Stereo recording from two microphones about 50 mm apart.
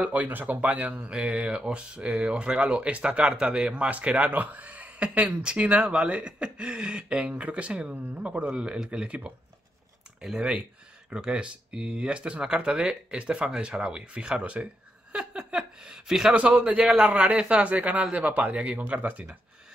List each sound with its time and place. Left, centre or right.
0.0 s speech: right
8.5 s speech: centre
10.2 s speech: centre
15.1 s a sound: centre
16.3 s speech: right